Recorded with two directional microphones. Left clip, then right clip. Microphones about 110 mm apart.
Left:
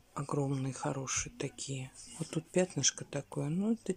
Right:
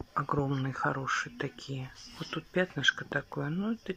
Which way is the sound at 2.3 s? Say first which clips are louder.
Right 1 dB; 50° left (ahead or behind).